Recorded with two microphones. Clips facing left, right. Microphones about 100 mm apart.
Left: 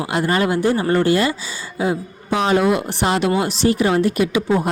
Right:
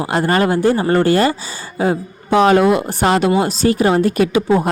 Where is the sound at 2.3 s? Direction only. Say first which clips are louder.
Right 5 dB; 55° right (ahead or behind).